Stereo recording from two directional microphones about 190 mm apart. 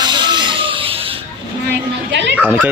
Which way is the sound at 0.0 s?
25° right (ahead or behind).